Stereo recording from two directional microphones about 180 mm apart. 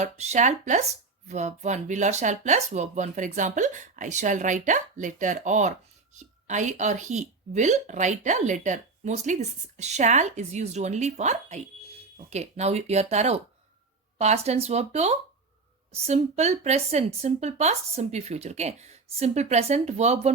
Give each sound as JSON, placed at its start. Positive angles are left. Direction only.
{"t": 0.0, "sound": "speech", "side_deg": -40}